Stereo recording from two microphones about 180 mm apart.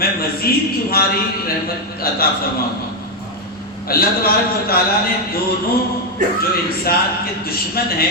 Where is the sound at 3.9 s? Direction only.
55° left (ahead or behind).